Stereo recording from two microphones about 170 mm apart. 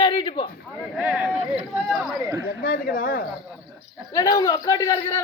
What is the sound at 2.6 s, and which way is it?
Speech, 60° left (ahead or behind).